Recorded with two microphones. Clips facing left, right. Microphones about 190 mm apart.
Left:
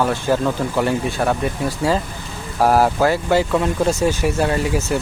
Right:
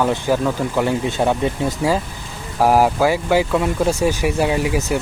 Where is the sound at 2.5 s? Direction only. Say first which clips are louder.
Right 1 dB; 10° right (ahead or behind).